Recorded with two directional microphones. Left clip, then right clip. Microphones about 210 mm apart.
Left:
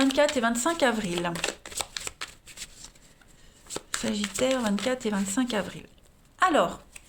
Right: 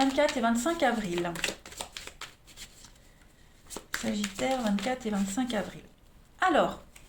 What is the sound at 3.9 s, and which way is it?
A woman's voice, 40° left (ahead or behind).